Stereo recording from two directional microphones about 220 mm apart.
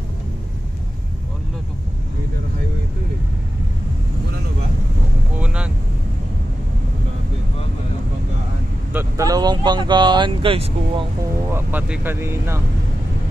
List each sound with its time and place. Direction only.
5.4 s vehicle: 5° right (ahead or behind)
8.9 s speech: 15° right (ahead or behind)
11.5 s speech: 10° right (ahead or behind)